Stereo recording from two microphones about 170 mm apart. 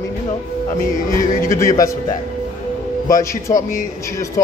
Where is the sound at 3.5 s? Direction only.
55° left (ahead or behind).